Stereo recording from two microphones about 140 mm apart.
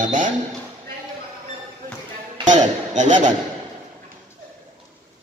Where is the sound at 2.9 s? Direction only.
60° right (ahead or behind).